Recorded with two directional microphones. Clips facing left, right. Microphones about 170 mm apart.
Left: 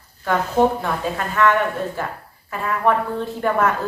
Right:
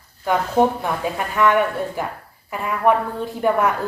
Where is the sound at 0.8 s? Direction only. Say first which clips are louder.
Even; 15° right (ahead or behind).